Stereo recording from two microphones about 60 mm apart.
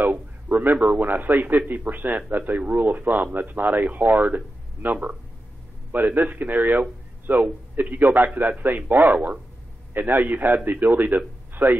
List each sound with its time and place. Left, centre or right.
0.6 s a man's voice: right
4.8 s speech: centre
5.9 s a man's voice: right